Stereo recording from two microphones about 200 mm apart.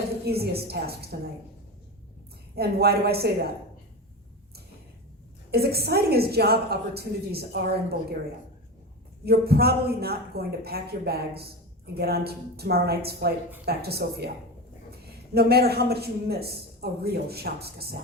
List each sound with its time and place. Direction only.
0.3 s a woman's voice: 50° right (ahead or behind)
2.6 s a woman's voice: 50° right (ahead or behind)
5.5 s a woman's voice: 50° right (ahead or behind)
9.2 s a woman's voice: 50° right (ahead or behind)
15.4 s a woman's voice: 50° right (ahead or behind)